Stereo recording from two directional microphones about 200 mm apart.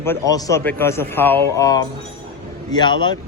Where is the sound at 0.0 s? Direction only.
15° left (ahead or behind).